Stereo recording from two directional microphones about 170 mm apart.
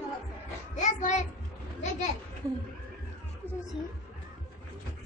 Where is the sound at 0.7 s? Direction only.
45° left (ahead or behind).